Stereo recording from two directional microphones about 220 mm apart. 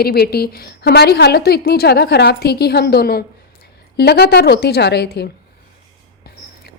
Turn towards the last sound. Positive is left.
turn(degrees=50)  # may be behind; listen again after turning